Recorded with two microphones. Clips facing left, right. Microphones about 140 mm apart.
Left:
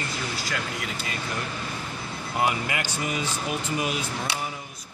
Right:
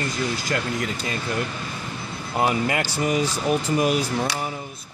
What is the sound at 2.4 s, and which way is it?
Speech, 25° right (ahead or behind).